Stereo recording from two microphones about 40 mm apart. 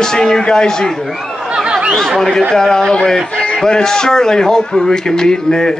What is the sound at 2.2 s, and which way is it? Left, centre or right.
Speech, centre.